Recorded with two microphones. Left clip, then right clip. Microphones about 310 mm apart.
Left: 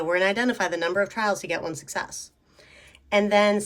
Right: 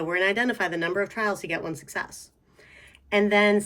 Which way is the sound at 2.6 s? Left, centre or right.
Centre.